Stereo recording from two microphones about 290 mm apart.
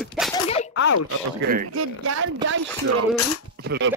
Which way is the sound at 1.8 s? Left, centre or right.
Right.